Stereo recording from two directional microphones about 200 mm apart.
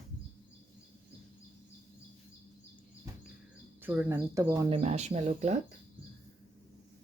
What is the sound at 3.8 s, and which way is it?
Speech, 10° right (ahead or behind).